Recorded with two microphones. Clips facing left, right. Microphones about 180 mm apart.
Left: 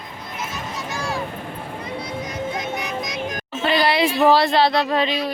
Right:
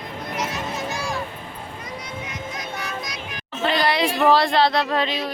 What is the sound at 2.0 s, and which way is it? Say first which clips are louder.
Music: left 7 dB; 35° left (ahead or behind).